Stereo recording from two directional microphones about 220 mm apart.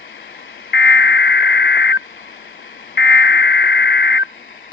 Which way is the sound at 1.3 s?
50° left (ahead or behind).